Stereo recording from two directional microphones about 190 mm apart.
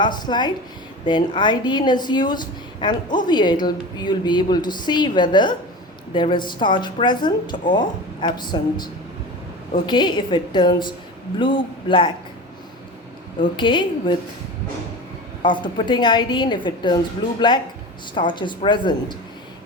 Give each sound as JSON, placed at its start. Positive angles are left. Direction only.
{"t": 0.0, "sound": "speech", "side_deg": 25}
{"t": 13.6, "sound": "speech", "side_deg": 25}
{"t": 15.4, "sound": "speech", "side_deg": 25}
{"t": 18.1, "sound": "speech", "side_deg": 25}